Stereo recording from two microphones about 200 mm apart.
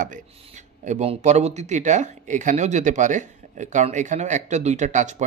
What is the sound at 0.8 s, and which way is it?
Speech, 35° right (ahead or behind).